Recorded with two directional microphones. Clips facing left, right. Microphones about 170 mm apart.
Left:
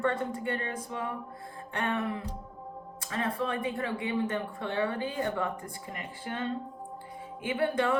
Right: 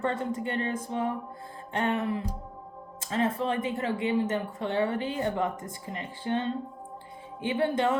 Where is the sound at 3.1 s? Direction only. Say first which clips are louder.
Right 4 dB; 25° right (ahead or behind).